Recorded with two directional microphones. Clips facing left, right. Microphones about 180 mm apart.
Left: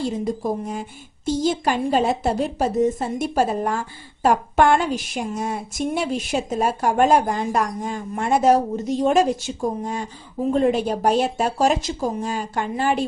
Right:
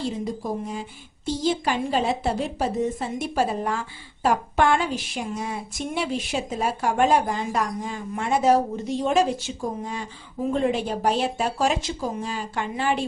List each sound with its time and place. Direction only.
0.7 s a woman's voice: 50° left (ahead or behind)